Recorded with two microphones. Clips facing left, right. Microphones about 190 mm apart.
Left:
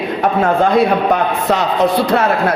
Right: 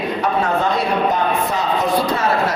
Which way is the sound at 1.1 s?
75° left (ahead or behind).